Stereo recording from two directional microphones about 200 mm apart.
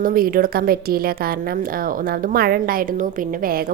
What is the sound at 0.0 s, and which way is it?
Speech, 45° right (ahead or behind).